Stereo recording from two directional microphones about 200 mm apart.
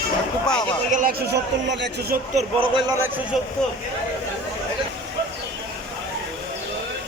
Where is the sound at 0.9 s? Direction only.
40° right (ahead or behind).